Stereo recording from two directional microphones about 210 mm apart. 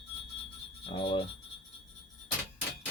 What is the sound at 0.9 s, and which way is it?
Cutlery, 25° left (ahead or behind).